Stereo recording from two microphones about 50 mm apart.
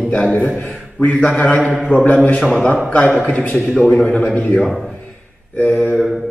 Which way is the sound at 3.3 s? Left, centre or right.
Left.